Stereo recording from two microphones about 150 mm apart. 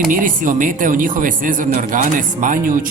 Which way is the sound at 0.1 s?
60° right (ahead or behind).